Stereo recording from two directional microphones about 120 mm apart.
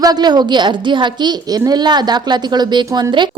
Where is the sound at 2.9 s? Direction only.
25° right (ahead or behind).